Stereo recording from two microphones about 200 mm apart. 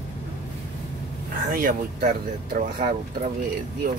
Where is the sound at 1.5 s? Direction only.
45° right (ahead or behind).